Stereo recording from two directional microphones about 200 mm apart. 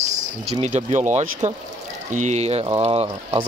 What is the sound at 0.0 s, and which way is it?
Speech, 35° right (ahead or behind).